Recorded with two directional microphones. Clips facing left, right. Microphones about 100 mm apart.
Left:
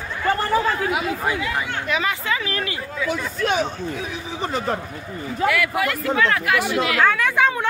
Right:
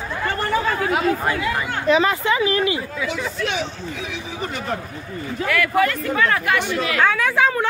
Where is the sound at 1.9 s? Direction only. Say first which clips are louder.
Right 8 dB; 30° right (ahead or behind).